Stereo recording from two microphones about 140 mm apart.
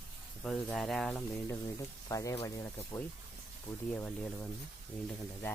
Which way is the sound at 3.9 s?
10° left (ahead or behind).